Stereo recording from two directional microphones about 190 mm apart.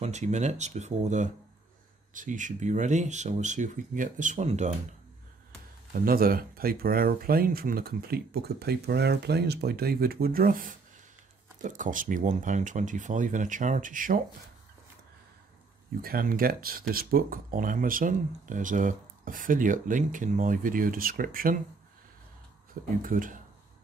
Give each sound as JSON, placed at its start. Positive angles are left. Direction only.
{"t": 0.0, "sound": "speech", "side_deg": -35}
{"t": 5.9, "sound": "speech", "side_deg": -50}
{"t": 16.0, "sound": "speech", "side_deg": -50}
{"t": 23.0, "sound": "speech", "side_deg": -45}